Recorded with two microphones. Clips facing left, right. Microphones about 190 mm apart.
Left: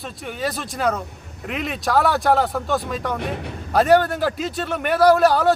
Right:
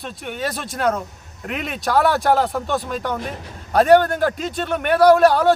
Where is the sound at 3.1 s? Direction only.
65° left (ahead or behind).